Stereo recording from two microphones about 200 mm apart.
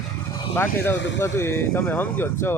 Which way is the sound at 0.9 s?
65° left (ahead or behind).